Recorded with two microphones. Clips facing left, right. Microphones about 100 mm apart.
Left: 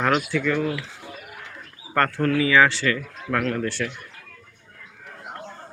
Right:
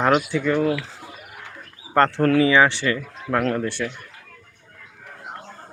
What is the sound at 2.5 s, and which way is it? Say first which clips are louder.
Speech: right 1 dB; 20° right (ahead or behind).